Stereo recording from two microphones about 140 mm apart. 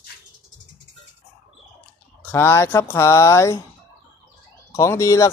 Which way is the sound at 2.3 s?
15° left (ahead or behind).